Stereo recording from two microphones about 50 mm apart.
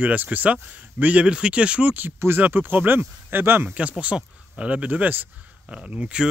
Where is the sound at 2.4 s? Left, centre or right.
Right.